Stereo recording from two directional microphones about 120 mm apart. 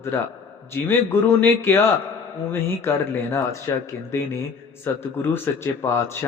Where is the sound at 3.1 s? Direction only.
20° left (ahead or behind).